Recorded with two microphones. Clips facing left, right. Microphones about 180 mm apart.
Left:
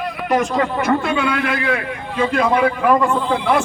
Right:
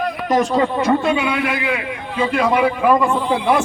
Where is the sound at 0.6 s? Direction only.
25° right (ahead or behind).